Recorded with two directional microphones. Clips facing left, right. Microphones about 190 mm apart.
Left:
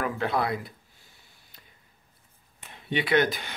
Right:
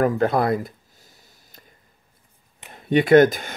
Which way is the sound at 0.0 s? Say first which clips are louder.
Right 8 dB; 45° right (ahead or behind).